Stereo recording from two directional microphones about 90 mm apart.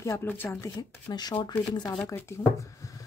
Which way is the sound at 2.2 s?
35° left (ahead or behind).